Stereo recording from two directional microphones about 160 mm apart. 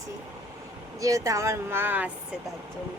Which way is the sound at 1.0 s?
20° right (ahead or behind).